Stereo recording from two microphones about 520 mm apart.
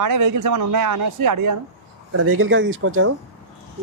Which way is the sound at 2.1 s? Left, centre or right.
Right.